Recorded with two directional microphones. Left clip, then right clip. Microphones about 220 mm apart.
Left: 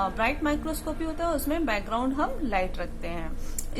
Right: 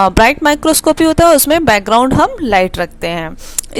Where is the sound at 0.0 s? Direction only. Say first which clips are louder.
Right 17 dB; 45° right (ahead or behind).